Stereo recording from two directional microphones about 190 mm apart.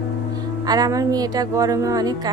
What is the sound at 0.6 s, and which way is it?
Speech, 20° right (ahead or behind).